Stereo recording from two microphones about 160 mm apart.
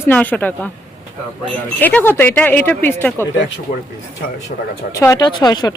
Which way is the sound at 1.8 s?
10° left (ahead or behind).